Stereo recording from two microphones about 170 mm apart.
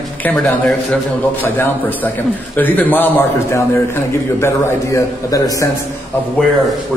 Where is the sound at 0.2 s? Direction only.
10° left (ahead or behind).